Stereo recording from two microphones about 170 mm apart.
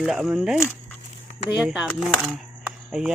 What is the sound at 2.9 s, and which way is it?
Speech, 5° right (ahead or behind).